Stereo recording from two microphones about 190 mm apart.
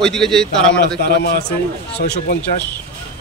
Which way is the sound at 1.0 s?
55° left (ahead or behind).